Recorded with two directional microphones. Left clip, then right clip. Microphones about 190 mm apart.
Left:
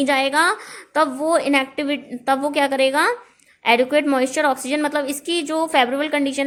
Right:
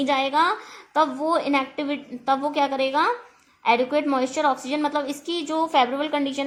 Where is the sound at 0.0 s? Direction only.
25° left (ahead or behind).